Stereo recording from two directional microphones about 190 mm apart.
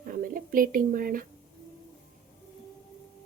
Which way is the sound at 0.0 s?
45° right (ahead or behind).